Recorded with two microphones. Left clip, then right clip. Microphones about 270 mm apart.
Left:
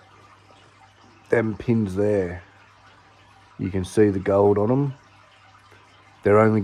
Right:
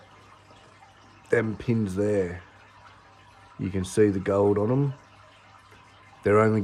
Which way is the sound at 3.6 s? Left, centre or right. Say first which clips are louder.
Left 3 dB; centre.